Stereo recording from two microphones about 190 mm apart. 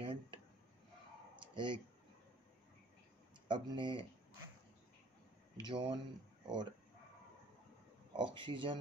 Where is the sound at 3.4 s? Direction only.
25° right (ahead or behind).